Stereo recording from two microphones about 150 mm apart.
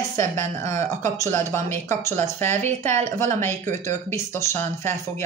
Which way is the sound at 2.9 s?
55° right (ahead or behind).